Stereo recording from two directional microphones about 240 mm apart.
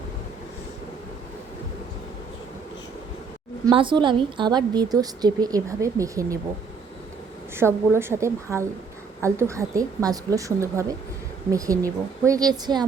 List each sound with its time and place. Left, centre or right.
3.7 s a woman's voice: right
7.5 s a woman's voice: centre